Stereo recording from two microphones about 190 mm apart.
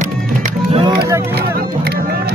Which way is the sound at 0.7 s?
25° right (ahead or behind).